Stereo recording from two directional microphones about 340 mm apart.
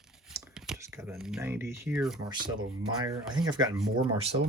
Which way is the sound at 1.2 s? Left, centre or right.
Centre.